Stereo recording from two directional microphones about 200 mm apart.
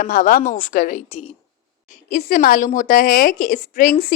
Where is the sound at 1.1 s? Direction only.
30° left (ahead or behind).